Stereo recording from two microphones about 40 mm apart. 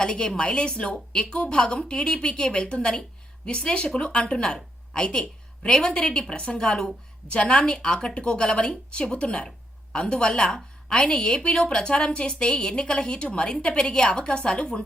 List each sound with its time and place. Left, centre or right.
0.0 s a woman's voice: left
6.1 s a woman's voice: left